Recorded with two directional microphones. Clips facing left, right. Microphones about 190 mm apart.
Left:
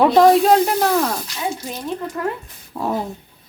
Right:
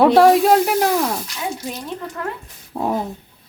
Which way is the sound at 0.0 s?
10° right (ahead or behind).